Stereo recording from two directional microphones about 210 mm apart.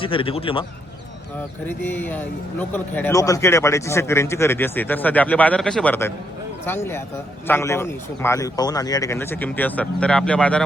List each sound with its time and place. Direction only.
0.0 s a man's voice: 25° left (ahead or behind)
1.6 s speech: 10° left (ahead or behind)